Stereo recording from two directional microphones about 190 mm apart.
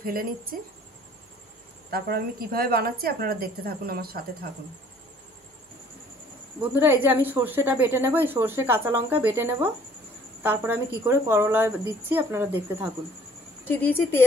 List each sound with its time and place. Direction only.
0.0 s a woman's voice: 50° right (ahead or behind)
1.9 s a woman's voice: 55° right (ahead or behind)
6.8 s a woman's voice: 10° right (ahead or behind)
13.7 s a woman's voice: 10° left (ahead or behind)